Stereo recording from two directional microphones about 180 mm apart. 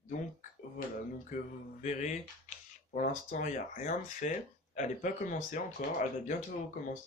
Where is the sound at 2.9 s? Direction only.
50° left (ahead or behind).